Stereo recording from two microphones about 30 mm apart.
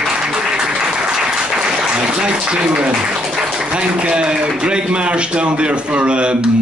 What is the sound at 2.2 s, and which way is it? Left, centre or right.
A man's voice, right.